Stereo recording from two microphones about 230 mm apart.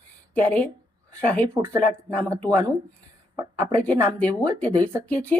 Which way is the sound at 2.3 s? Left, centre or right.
Centre.